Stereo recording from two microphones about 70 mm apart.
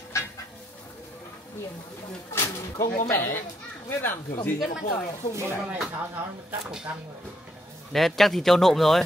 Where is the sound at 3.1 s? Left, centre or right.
Left.